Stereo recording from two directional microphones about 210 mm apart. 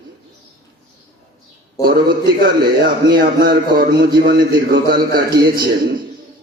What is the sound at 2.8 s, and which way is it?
Speech, 45° right (ahead or behind).